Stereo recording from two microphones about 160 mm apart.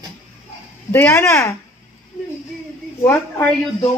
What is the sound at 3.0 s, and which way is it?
Speech, 15° left (ahead or behind).